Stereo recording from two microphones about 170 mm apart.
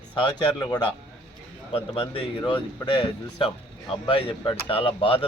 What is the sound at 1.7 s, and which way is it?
Speech, 35° left (ahead or behind).